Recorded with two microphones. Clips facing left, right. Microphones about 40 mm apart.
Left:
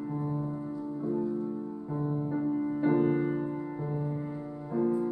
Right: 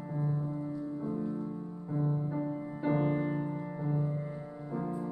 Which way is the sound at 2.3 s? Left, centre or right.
Centre.